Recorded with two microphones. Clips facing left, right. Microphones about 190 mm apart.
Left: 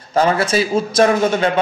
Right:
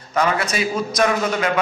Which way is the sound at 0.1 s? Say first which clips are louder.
Left 5 dB; 30° left (ahead or behind).